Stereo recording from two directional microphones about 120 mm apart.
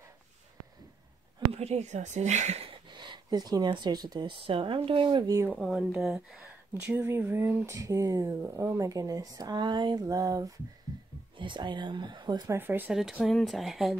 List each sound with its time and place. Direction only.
1.5 s speech: 65° right (ahead or behind)
2.9 s speech: 40° right (ahead or behind)
5.5 s speech: centre (ahead or behind)
6.7 s speech: 20° right (ahead or behind)
11.3 s speech: 40° right (ahead or behind)
12.5 s speech: 15° right (ahead or behind)
12.9 s speech: 5° right (ahead or behind)